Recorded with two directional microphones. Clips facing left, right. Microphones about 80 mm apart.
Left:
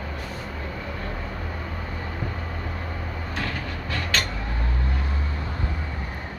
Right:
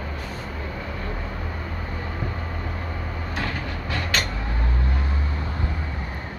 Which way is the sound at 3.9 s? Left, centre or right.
Centre.